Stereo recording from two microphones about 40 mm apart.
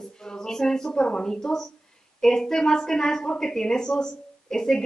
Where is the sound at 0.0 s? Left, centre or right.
Centre.